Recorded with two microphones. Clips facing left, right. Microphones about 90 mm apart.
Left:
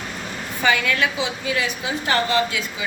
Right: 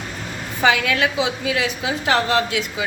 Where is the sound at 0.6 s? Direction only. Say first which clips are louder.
Right 2 dB; 90° right.